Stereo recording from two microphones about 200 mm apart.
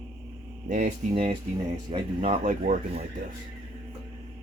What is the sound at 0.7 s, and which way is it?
Speech, 40° right (ahead or behind).